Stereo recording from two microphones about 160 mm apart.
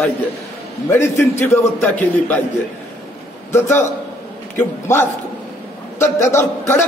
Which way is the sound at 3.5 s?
15° left (ahead or behind).